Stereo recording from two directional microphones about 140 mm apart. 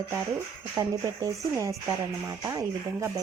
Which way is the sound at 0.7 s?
20° right (ahead or behind).